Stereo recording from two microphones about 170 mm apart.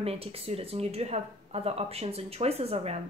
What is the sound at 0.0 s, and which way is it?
Speech, 35° right (ahead or behind).